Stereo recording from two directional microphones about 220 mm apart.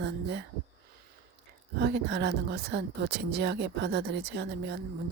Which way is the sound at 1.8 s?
50° right (ahead or behind).